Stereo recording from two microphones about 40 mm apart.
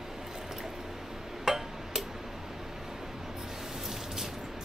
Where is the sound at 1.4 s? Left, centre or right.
Centre.